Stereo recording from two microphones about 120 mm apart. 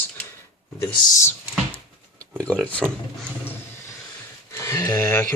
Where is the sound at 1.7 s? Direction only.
10° left (ahead or behind).